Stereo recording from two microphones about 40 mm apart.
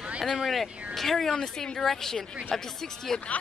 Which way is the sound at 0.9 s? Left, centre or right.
Centre.